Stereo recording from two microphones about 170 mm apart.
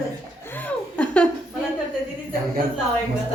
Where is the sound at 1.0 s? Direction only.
5° left (ahead or behind).